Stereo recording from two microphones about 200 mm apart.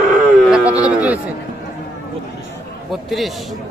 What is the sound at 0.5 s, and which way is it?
Speech, 5° right (ahead or behind).